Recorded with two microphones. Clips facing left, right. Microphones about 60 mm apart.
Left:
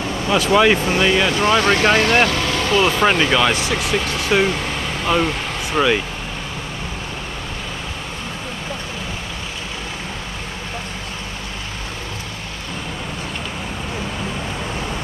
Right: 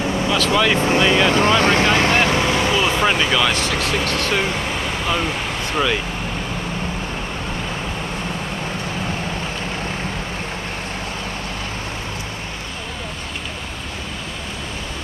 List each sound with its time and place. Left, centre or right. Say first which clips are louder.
0.3 s speech: left 4 dB; centre
1.3 s speech: right 1 dB; right
2.7 s speech: left 2 dB; centre